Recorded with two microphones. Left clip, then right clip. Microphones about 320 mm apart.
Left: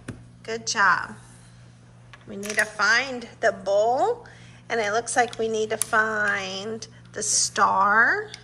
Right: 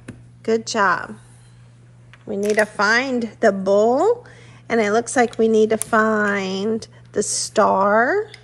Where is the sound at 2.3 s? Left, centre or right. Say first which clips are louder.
Right 7 dB; centre.